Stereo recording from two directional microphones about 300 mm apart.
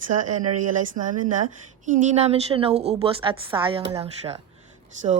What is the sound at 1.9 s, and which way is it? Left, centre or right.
A woman's voice, right.